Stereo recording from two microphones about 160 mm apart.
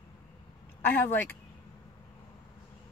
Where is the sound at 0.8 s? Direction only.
15° left (ahead or behind).